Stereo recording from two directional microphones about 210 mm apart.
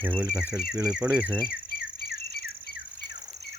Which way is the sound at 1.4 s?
45° left (ahead or behind).